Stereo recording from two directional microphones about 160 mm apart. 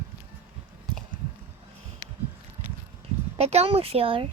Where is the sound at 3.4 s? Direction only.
40° right (ahead or behind).